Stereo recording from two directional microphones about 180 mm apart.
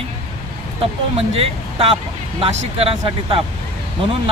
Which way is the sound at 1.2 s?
35° right (ahead or behind).